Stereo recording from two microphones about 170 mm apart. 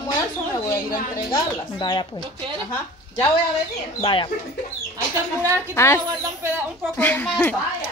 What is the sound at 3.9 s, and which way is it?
Speech, 30° left (ahead or behind).